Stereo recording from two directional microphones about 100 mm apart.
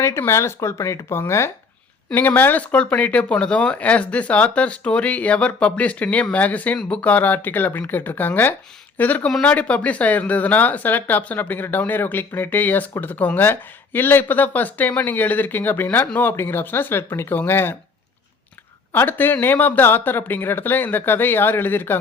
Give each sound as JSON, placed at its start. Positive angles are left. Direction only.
{"t": 0.0, "sound": "speech", "side_deg": 25}
{"t": 18.9, "sound": "speech", "side_deg": 20}